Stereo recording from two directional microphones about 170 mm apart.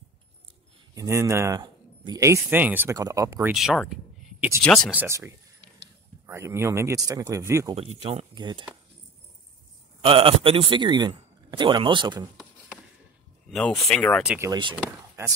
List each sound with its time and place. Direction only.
0.9 s speech: 15° right (ahead or behind)
3.5 s a sound: centre (ahead or behind)
4.6 s speech: 5° left (ahead or behind)
4.9 s speech: 15° right (ahead or behind)
7.7 s speech: 35° right (ahead or behind)
10.0 s a man's voice: 30° right (ahead or behind)
13.5 s speech: centre (ahead or behind)
14.5 s a man's voice: 30° right (ahead or behind)
14.8 s speech: 10° right (ahead or behind)